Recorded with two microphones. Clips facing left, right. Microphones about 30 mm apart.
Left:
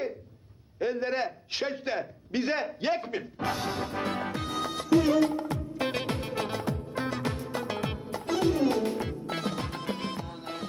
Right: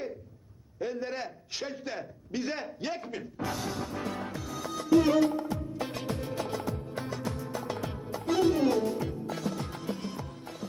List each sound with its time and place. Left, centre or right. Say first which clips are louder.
0.8 s a man's voice: left 5 dB; left
5.5 s music: left 3 dB; left